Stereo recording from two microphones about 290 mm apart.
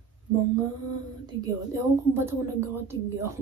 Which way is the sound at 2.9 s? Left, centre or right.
Centre.